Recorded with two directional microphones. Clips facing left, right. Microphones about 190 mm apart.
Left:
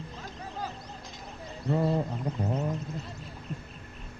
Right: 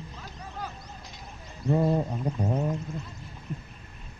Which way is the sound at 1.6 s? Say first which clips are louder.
Right 3 dB; 15° right (ahead or behind).